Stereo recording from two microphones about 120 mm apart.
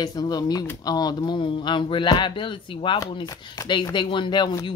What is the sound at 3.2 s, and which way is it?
Speech, 30° left (ahead or behind).